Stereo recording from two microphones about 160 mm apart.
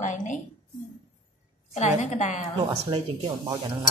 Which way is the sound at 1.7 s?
45° left (ahead or behind).